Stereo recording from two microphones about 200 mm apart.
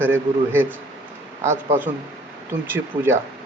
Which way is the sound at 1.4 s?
35° right (ahead or behind).